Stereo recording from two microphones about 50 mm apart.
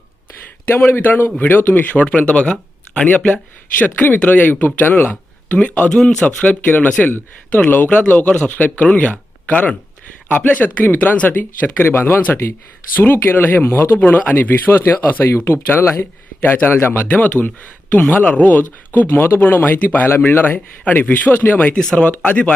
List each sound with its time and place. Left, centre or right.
0.9 s speech: left
4.9 s speech: left
5.5 s speech: left
5.9 s speech: centre
6.2 s speech: left
14.0 s speech: left
14.7 s speech: left
17.1 s speech: left
18.9 s speech: left
21.8 s speech: centre